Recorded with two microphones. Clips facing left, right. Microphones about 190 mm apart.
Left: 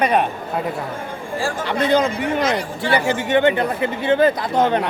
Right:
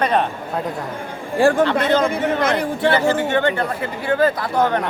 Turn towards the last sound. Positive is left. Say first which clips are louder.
# left 1 dB
turn(degrees=20)  # may be behind; listen again after turning